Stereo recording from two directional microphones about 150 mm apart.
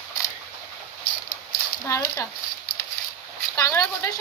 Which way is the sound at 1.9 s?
20° left (ahead or behind).